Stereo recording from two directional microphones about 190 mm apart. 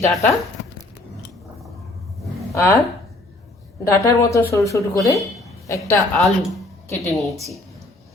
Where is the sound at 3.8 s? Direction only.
15° left (ahead or behind).